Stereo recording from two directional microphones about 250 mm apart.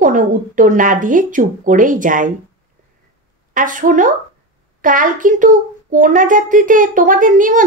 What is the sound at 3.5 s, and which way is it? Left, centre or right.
A woman's voice, right.